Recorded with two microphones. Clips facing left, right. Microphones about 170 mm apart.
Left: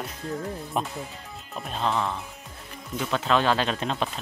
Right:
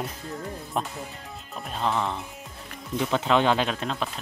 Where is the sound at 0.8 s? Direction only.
10° left (ahead or behind).